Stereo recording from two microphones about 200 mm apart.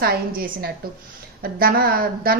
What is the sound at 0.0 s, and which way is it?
A woman's voice, 50° right (ahead or behind).